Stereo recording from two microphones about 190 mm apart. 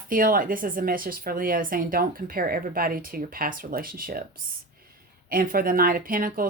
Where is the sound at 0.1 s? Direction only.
50° right (ahead or behind).